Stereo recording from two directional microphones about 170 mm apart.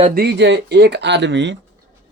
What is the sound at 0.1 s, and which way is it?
Speech, 75° right (ahead or behind).